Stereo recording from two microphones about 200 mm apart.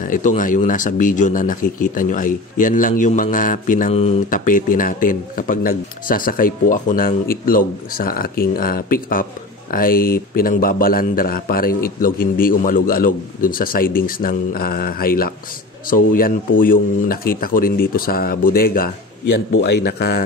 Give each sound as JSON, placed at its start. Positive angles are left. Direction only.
{"t": 0.1, "sound": "speech", "side_deg": 40}